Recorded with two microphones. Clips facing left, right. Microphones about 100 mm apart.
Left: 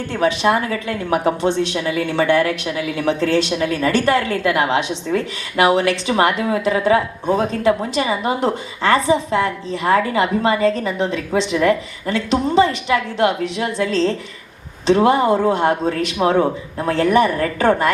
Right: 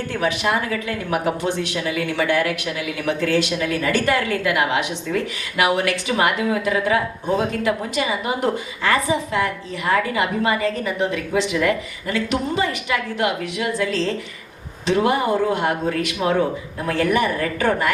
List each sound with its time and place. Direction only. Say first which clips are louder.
0.1 s a woman's voice: left 5 dB; 30° left (ahead or behind)